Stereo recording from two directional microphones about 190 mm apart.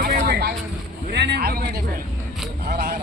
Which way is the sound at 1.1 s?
60° right (ahead or behind).